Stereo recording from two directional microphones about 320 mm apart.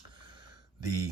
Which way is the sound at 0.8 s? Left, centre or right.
Centre.